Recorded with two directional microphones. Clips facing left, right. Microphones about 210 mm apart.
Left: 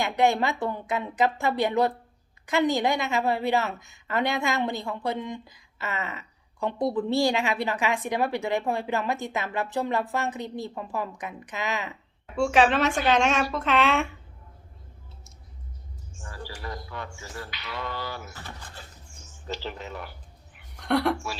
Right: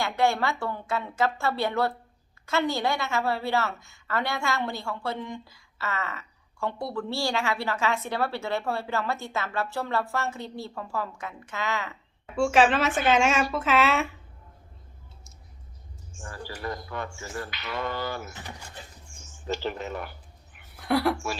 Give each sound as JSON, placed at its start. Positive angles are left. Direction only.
{"t": 0.0, "sound": "a woman's voice", "side_deg": 20}
{"t": 12.4, "sound": "a woman's voice", "side_deg": 0}
{"t": 16.1, "sound": "speech", "side_deg": -50}
{"t": 18.3, "sound": "speech", "side_deg": -15}
{"t": 19.2, "sound": "speech", "side_deg": -50}
{"t": 20.7, "sound": "speech", "side_deg": -5}